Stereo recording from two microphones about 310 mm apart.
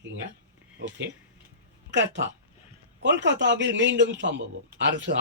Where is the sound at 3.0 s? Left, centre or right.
Right.